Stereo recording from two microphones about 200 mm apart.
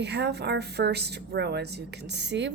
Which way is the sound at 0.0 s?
60° right (ahead or behind).